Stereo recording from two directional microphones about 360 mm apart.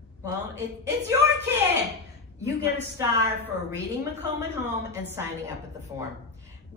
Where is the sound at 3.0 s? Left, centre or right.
Centre.